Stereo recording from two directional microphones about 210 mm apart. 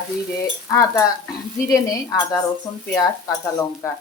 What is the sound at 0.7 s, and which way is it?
Speech, 15° left (ahead or behind).